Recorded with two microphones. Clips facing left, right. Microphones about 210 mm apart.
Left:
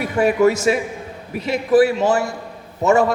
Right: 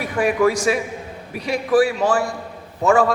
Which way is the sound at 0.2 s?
25° left (ahead or behind).